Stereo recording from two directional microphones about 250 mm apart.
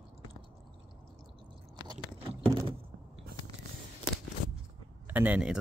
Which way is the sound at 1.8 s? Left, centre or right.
Centre.